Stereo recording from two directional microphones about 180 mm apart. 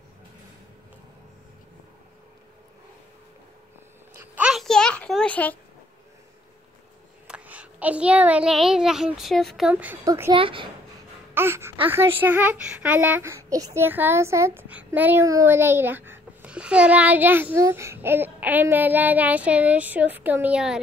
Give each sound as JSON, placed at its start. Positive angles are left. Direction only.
{"t": 4.1, "sound": "a sound", "side_deg": -5}
{"t": 7.2, "sound": "a child's voice", "side_deg": -5}
{"t": 10.3, "sound": "speech", "side_deg": -30}
{"t": 11.3, "sound": "a child's voice", "side_deg": -15}